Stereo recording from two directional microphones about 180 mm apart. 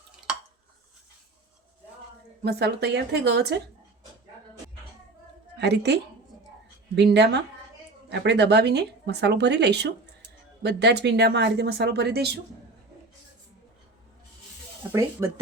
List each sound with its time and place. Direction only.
2.4 s speech: 65° right (ahead or behind)
5.5 s a woman's voice: 65° right (ahead or behind)
15.2 s speech: 15° right (ahead or behind)